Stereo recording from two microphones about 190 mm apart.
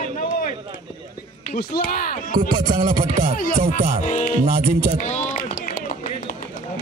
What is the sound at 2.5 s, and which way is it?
Music, 25° right (ahead or behind).